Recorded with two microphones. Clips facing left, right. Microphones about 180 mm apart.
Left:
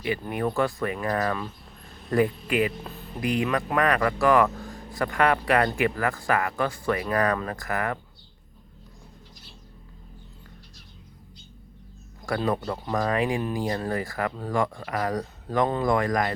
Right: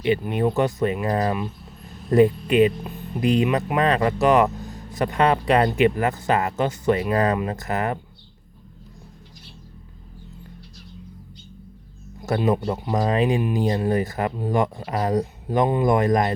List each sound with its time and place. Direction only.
0.2 s speech: 20° right (ahead or behind)
12.2 s speech: 20° right (ahead or behind)